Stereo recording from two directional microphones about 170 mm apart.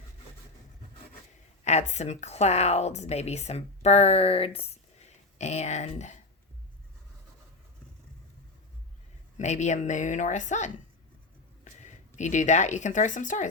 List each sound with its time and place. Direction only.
1.6 s speech: 40° left (ahead or behind)
9.4 s speech: 45° left (ahead or behind)